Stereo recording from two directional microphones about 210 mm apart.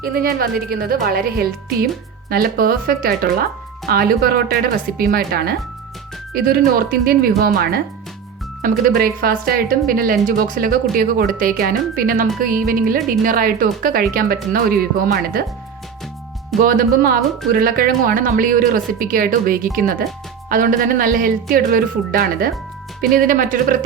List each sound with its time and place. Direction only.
0.0 s speech: 45° right (ahead or behind)
16.6 s speech: 45° right (ahead or behind)